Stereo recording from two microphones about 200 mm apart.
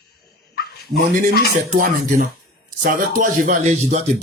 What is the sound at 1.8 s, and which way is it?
Speech, 45° right (ahead or behind).